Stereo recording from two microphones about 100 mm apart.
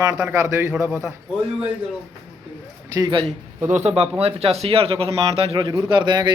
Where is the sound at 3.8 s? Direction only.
85° right.